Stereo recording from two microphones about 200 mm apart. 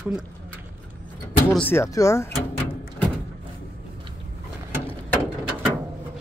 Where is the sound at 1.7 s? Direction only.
15° left (ahead or behind).